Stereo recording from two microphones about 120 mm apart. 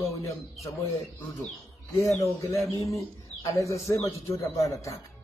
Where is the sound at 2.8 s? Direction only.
25° left (ahead or behind).